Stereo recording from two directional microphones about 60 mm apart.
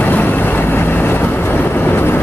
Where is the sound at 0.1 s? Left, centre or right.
Left.